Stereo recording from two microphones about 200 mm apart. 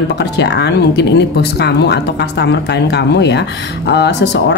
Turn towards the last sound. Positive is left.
turn(degrees=55)  # may be behind; listen again after turning